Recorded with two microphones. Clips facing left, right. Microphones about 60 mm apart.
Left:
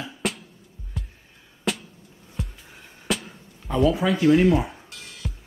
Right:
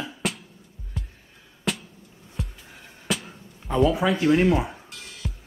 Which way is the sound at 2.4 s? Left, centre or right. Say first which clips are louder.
Left 1 dB; centre.